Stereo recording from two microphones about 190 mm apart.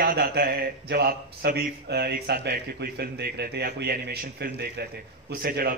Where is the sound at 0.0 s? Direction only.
55° right (ahead or behind).